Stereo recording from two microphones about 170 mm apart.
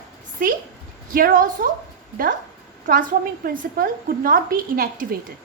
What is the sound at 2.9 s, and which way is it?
A woman's voice, 55° right (ahead or behind).